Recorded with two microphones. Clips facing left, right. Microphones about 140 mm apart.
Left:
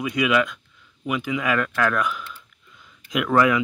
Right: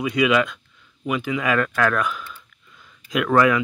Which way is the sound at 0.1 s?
5° left (ahead or behind).